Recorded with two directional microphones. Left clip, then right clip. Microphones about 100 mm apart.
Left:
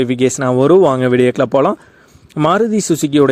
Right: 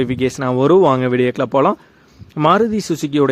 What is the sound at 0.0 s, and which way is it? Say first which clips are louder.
Speech: left 4 dB; 45° left (ahead or behind).